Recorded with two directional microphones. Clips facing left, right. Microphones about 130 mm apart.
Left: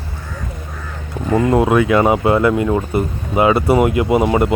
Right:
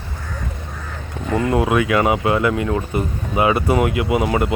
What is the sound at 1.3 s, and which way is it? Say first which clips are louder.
Speech: left 4 dB; 30° left (ahead or behind).